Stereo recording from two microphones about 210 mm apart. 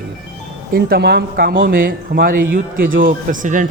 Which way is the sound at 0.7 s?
50° right (ahead or behind).